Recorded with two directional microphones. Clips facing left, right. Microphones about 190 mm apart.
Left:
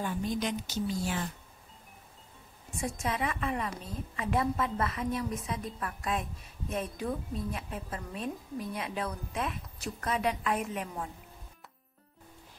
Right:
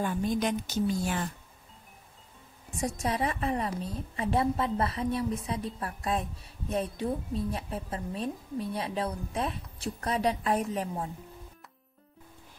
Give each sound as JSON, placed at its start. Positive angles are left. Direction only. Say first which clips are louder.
{"t": 0.0, "sound": "a woman's voice", "louder": "right 4 dB", "side_deg": -50}
{"t": 3.0, "sound": "a woman's voice", "louder": "right 3 dB", "side_deg": -35}